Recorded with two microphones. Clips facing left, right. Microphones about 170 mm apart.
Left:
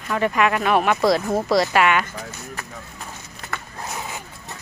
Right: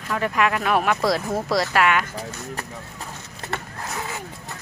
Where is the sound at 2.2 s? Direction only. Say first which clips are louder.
Right 2 dB; 35° right (ahead or behind).